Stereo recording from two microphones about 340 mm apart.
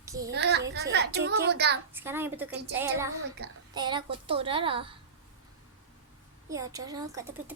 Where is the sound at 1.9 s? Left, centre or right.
Centre.